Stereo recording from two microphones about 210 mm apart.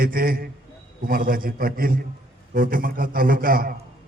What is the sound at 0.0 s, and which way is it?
A man's voice, 45° right (ahead or behind).